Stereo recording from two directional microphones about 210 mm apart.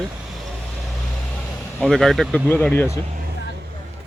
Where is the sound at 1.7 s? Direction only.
5° left (ahead or behind).